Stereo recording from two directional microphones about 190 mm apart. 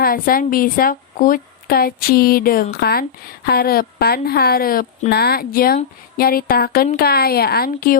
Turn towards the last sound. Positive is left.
turn(degrees=50)  # may be behind; listen again after turning